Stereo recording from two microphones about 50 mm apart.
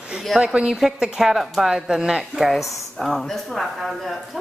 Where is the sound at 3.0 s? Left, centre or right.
Centre.